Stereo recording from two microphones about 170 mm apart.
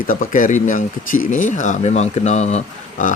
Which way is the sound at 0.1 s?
50° left (ahead or behind).